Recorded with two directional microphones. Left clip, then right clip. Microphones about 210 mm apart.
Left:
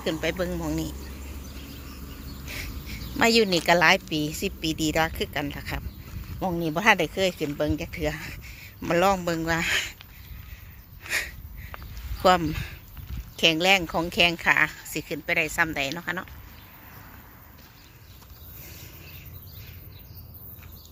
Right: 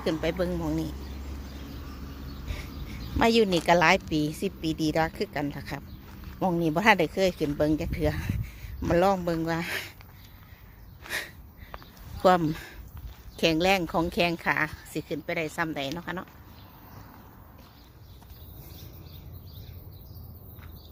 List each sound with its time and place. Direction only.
0.0 s a woman's voice: 10° right (ahead or behind)
2.5 s a woman's voice: centre (ahead or behind)
11.7 s a sound: centre (ahead or behind)
12.2 s a woman's voice: 10° right (ahead or behind)